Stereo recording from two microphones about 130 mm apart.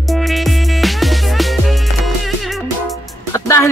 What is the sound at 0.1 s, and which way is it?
Music, centre (ahead or behind).